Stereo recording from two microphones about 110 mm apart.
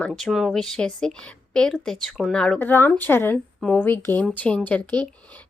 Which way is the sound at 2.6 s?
15° left (ahead or behind).